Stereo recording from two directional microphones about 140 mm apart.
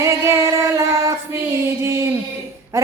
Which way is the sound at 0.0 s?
20° right (ahead or behind).